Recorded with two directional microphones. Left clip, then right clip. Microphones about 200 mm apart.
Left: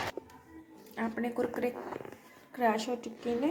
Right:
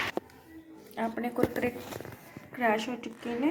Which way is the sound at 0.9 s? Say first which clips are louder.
Right 2 dB; 5° right (ahead or behind).